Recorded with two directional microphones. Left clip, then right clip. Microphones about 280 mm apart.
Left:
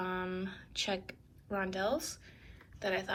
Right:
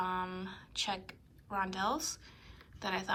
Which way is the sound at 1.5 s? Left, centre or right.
Centre.